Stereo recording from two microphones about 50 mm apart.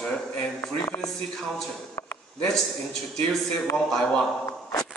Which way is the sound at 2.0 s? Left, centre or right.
Left.